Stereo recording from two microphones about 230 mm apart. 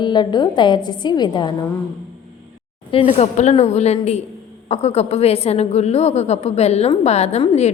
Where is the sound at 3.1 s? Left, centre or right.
Left.